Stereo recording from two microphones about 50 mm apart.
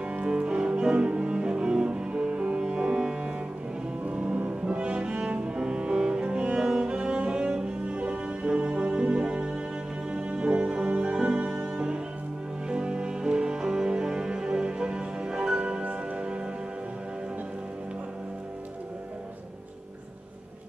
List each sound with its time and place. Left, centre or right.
0.0 s music: right
0.3 s cello: centre
8.6 s music: centre